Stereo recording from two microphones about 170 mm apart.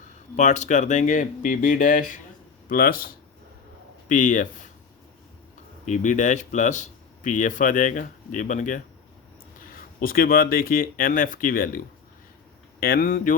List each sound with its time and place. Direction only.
0.3 s speech: 45° left (ahead or behind); by 3.1 s 60° left (ahead or behind)
4.1 s speech: 50° left (ahead or behind)
5.8 s speech: 45° left (ahead or behind)
10.0 s speech: 60° left (ahead or behind)
12.8 s speech: 60° left (ahead or behind)